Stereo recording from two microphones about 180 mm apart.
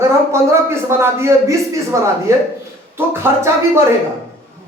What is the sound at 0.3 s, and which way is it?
A man's voice, 15° right (ahead or behind).